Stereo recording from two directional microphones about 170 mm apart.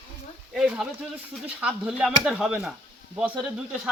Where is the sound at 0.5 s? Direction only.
Centre (ahead or behind).